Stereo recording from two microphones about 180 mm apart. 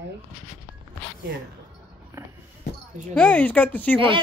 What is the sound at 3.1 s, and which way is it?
Speech, 5° left (ahead or behind).